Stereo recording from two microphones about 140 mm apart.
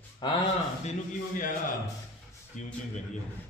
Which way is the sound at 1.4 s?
70° left (ahead or behind).